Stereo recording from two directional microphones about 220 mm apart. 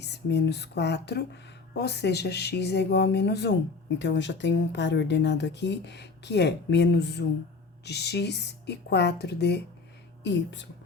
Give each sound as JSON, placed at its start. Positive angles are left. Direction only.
{"t": 0.0, "sound": "speech", "side_deg": 50}